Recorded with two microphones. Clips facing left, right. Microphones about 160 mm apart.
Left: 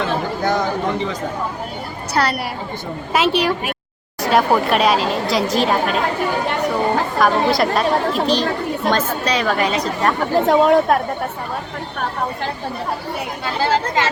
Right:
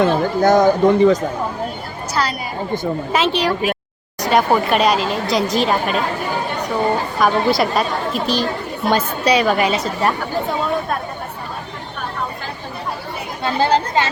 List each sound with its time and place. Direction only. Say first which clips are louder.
0.0 s speech: right 6 dB; 45° right (ahead or behind)
2.2 s a woman's voice: left 2 dB; 55° left (ahead or behind)
3.1 s speech: left 2 dB; 10° left (ahead or behind)
7.2 s a woman's voice: even; centre (ahead or behind)
10.3 s speech: left 7 dB; 90° left